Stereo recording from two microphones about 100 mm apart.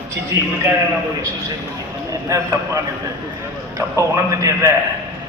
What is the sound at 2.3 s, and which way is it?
A man's voice, 30° right (ahead or behind).